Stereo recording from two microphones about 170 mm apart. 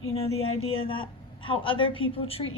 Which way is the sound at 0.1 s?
35° left (ahead or behind).